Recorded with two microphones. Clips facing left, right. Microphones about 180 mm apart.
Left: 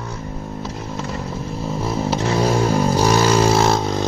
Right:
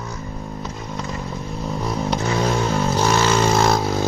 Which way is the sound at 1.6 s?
Centre (ahead or behind).